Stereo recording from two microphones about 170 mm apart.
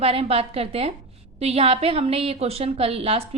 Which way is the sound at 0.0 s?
35° right (ahead or behind).